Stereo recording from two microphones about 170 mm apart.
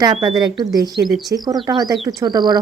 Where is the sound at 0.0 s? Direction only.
25° right (ahead or behind).